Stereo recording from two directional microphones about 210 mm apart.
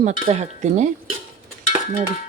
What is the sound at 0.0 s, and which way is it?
Dishes, 35° right (ahead or behind).